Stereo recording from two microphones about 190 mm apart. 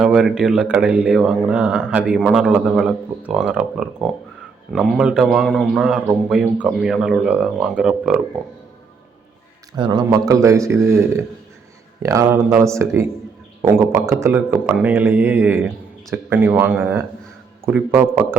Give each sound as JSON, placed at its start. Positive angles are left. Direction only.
{"t": 0.0, "sound": "speech", "side_deg": -5}
{"t": 9.7, "sound": "a man's voice", "side_deg": -25}